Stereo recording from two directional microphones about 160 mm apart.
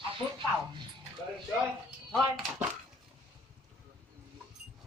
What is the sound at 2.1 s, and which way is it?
Speech, centre (ahead or behind).